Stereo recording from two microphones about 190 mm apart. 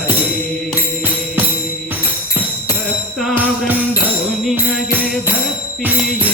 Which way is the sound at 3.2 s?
Centre (ahead or behind).